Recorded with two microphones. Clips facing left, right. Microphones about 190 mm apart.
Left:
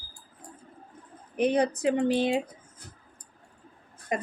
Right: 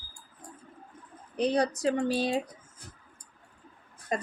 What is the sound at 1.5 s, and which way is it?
Speech, 20° left (ahead or behind).